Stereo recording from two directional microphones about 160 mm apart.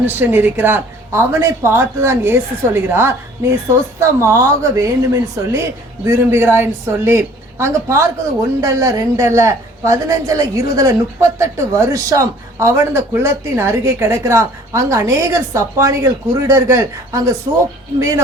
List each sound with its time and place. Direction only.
0.1 s a woman's voice: 10° right (ahead or behind)